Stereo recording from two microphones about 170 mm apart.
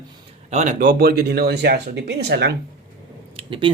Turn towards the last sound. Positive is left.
turn(degrees=-30)  # may be behind; listen again after turning